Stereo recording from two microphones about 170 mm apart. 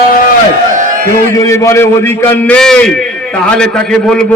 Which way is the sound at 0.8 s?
50° right (ahead or behind).